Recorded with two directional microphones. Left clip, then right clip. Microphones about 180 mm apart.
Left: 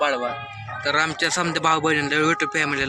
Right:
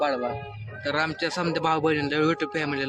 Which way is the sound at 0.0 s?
15° right (ahead or behind).